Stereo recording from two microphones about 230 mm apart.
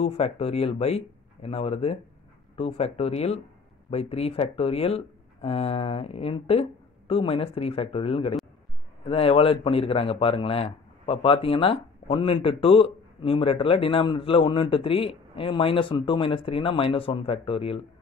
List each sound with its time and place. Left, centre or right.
0.0 s a man's voice: left